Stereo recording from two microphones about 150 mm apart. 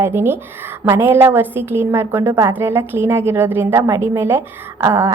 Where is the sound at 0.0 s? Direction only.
15° right (ahead or behind).